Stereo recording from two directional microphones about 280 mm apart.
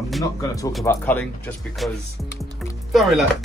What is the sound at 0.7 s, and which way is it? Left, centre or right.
Speech, centre.